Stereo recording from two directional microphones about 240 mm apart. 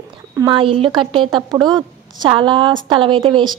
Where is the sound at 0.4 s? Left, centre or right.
Right.